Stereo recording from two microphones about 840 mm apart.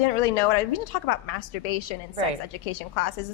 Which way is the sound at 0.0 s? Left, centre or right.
Left.